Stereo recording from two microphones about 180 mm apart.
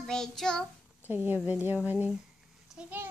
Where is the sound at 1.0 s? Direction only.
10° right (ahead or behind).